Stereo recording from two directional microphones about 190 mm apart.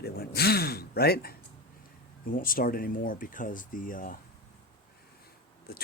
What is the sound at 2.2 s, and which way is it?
Speech, 45° left (ahead or behind).